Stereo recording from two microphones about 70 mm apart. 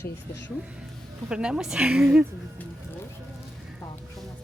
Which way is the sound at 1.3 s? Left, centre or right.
Centre.